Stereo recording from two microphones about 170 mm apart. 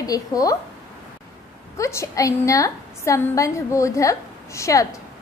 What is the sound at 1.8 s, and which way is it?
A woman's voice, 15° left (ahead or behind).